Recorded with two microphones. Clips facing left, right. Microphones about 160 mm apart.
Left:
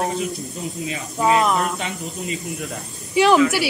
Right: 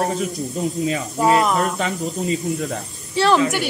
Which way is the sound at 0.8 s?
40° right (ahead or behind).